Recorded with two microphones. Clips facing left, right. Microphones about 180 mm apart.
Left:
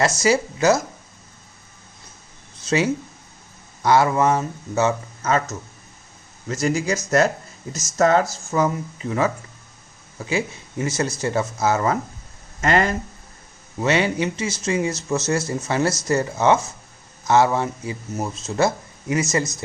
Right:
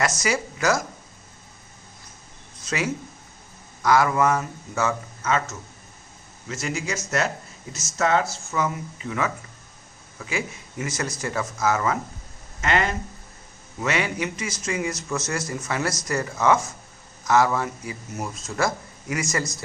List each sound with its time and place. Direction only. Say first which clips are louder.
0.2 s speech: left 6 dB; 25° left (ahead or behind)
2.6 s speech: left 6 dB; 30° left (ahead or behind)
5.2 s speech: left 3 dB; 40° left (ahead or behind)
13.8 s speech: left 5 dB; 30° left (ahead or behind)